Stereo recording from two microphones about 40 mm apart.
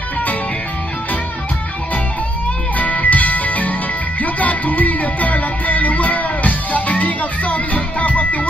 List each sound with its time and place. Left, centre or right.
2.8 s music: left